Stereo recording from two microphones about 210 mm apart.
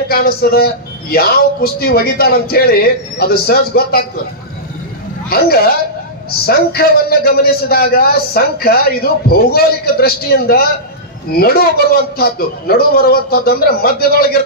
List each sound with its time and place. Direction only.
0.1 s a man's voice: 45° left (ahead or behind)
5.3 s a man's voice: 45° left (ahead or behind)